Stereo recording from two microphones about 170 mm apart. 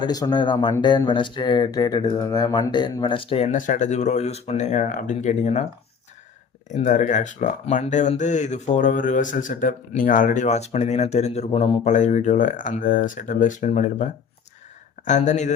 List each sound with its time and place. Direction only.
0.0 s speech: 25° left (ahead or behind); by 5.6 s 40° left (ahead or behind)
6.7 s speech: 45° left (ahead or behind)